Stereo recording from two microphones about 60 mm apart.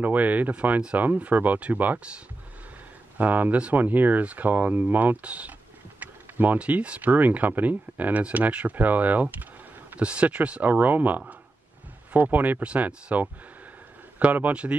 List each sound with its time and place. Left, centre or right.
0.0 s speech: right